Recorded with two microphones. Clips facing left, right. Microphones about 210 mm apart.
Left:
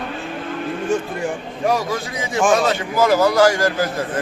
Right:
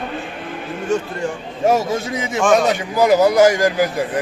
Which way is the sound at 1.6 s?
25° right (ahead or behind).